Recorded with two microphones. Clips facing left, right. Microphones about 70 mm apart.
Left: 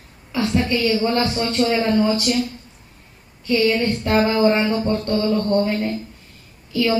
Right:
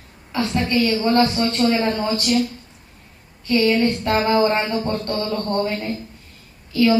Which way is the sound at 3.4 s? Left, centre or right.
Right.